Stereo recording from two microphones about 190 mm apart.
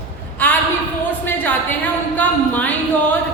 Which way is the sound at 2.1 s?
10° left (ahead or behind).